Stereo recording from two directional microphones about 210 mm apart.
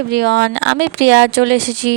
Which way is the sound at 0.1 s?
50° right (ahead or behind).